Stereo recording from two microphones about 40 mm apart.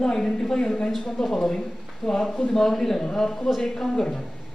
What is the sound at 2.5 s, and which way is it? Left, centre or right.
Speech, centre.